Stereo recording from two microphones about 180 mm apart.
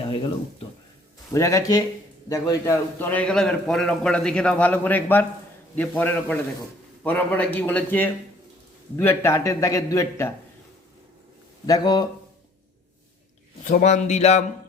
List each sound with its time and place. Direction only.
0.0 s a sound: 30° left (ahead or behind)
1.3 s a man's voice: 15° left (ahead or behind)
11.6 s speech: 20° left (ahead or behind)
13.7 s speech: 40° left (ahead or behind)